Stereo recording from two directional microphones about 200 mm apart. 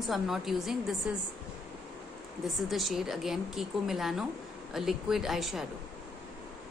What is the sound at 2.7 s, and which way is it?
A woman's voice, centre (ahead or behind).